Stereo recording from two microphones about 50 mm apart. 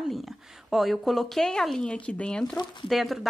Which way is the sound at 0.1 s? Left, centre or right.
Centre.